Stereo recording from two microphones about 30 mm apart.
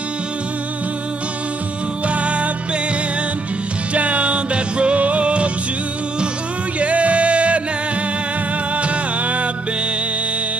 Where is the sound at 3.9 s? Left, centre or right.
Right.